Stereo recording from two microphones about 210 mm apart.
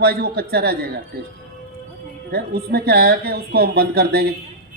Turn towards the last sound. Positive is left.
turn(degrees=-50)  # may be behind; listen again after turning